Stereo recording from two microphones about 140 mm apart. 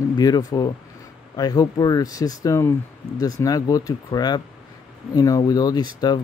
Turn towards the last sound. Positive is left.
turn(degrees=30)  # may be behind; listen again after turning